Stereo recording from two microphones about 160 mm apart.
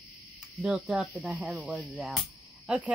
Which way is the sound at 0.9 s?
5° right (ahead or behind).